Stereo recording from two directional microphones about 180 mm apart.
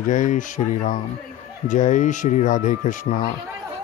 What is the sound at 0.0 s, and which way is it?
Speech, 45° left (ahead or behind).